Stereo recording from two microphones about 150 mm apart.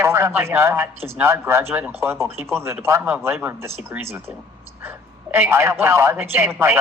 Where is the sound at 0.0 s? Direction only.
15° right (ahead or behind).